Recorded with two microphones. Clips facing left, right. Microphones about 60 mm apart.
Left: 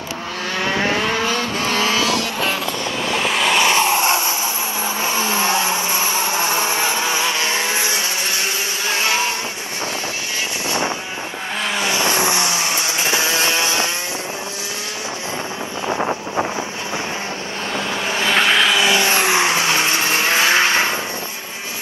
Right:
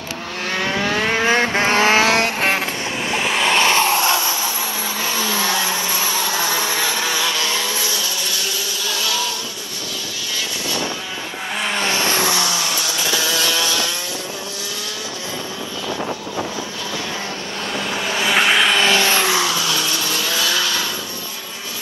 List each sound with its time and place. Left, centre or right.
0.6 s vehicle: left
1.0 s vehicle: right
3.1 s vehicle: centre
3.5 s a sound: left
8.8 s vehicle: left
11.8 s vehicle: left
15.9 s wind noise: left
17.7 s vehicle: left
18.2 s vehicle: centre
18.8 s vehicle: left